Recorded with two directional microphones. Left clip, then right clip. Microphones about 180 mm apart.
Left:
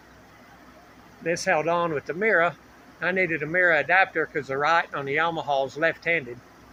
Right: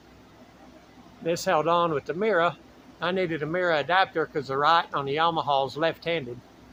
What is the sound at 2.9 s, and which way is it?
Speech, 65° right (ahead or behind).